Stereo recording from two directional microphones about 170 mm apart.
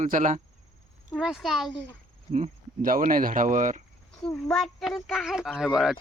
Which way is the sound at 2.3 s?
50° right (ahead or behind).